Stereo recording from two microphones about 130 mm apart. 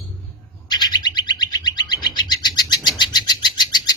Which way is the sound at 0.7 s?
35° left (ahead or behind).